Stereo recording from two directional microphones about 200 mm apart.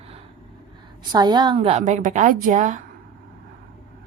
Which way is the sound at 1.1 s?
20° right (ahead or behind).